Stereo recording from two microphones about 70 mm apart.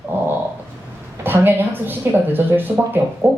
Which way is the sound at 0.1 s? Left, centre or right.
Right.